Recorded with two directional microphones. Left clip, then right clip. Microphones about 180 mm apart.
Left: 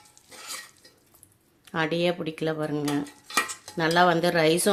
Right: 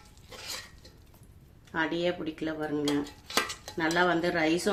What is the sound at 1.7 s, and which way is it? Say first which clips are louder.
Speech: left 4 dB; 60° left (ahead or behind).